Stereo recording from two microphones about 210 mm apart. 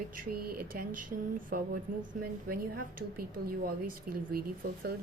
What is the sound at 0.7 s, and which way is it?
A woman's voice, 45° right (ahead or behind).